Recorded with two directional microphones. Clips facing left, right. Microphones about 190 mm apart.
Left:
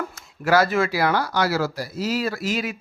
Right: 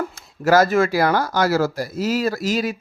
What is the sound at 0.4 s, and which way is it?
A man's voice, 45° right (ahead or behind).